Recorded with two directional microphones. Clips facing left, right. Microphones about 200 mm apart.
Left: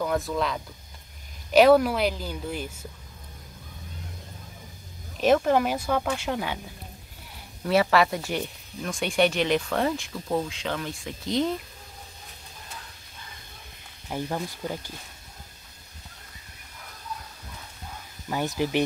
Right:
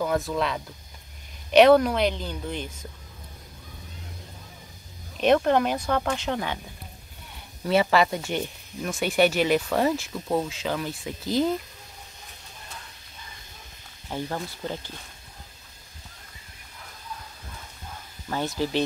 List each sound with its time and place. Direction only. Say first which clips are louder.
0.0 s speech: right 1 dB; centre (ahead or behind)
5.2 s speech: right 1 dB; 5° left (ahead or behind)
7.9 s speech: even; centre (ahead or behind)
14.0 s speech: left 1 dB; 10° left (ahead or behind)
18.3 s speech: left 1 dB; 15° left (ahead or behind)